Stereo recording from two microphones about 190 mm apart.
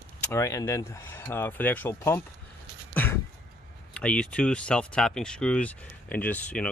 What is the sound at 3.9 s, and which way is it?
Speech, 5° left (ahead or behind).